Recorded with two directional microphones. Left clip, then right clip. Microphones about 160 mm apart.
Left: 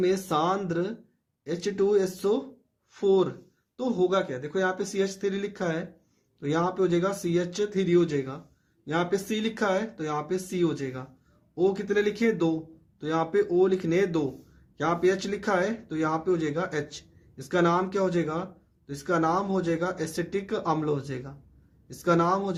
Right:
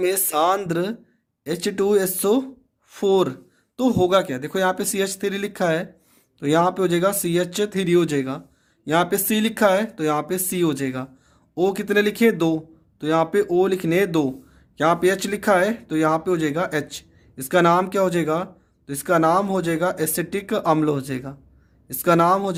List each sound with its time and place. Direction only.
0.0 s speech: 45° right (ahead or behind)